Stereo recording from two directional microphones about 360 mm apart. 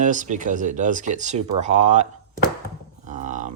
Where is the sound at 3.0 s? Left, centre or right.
Right.